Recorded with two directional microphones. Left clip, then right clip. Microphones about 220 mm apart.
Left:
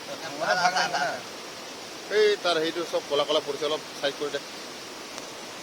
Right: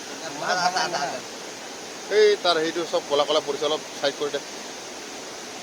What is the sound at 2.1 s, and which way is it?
Speech, 10° right (ahead or behind).